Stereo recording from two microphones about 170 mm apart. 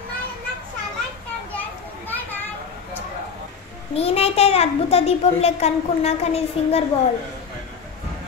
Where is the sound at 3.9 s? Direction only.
35° left (ahead or behind).